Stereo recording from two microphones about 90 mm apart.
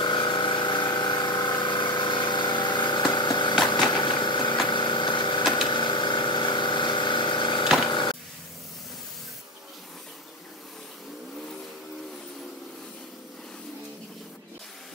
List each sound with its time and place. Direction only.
0.0 s pump: 65° left (ahead or behind)
3.9 s engine: 65° left (ahead or behind)
4.6 s a sound: 65° left (ahead or behind)